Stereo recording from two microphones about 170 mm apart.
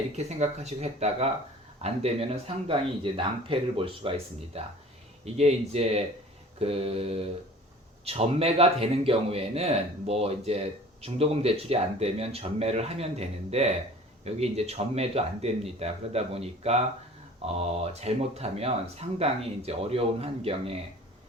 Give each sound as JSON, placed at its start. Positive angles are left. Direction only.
{"t": 0.2, "sound": "speech", "side_deg": -40}